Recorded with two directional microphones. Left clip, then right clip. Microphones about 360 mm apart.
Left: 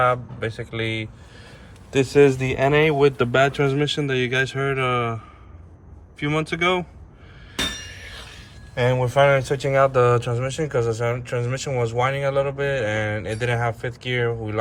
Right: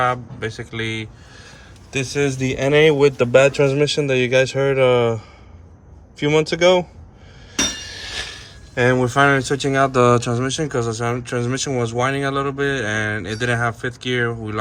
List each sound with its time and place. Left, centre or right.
0.0 s a man's voice: centre
7.9 s speech: centre